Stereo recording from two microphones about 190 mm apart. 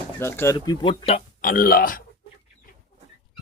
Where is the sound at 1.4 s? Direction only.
50° left (ahead or behind).